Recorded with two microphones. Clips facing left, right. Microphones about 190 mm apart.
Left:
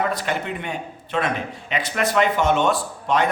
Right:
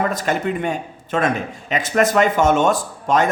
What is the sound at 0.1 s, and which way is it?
A man's voice, 45° right (ahead or behind).